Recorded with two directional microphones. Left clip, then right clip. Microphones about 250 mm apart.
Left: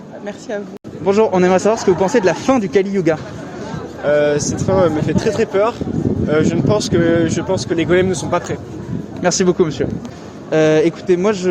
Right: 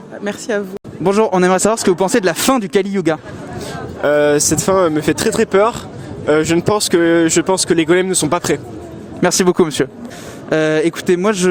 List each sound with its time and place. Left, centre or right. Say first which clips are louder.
0.3 s speech: right 5 dB; right